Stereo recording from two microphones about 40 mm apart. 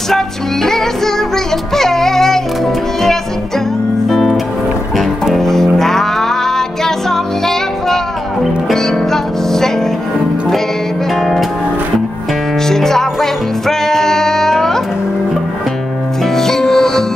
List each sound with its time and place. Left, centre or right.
0.1 s music: centre
4.1 s music: centre
11.1 s music: centre
12.6 s music: centre
16.3 s music: centre